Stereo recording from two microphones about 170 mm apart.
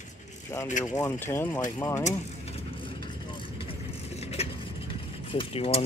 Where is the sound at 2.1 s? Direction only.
35° left (ahead or behind).